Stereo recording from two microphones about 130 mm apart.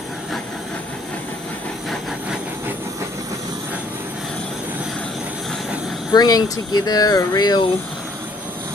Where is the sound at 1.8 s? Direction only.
Centre (ahead or behind).